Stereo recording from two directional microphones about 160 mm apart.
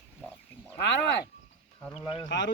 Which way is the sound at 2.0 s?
30° left (ahead or behind).